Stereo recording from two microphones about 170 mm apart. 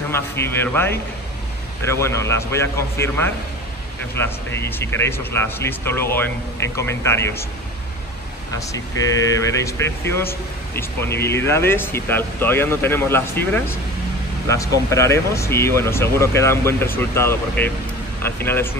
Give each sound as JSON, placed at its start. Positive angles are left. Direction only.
{"t": 0.1, "sound": "speech", "side_deg": 15}
{"t": 9.4, "sound": "speech", "side_deg": 15}